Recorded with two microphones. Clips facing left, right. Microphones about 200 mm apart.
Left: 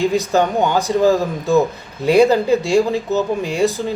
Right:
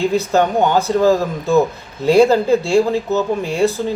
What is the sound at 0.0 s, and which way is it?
Speech, 15° left (ahead or behind).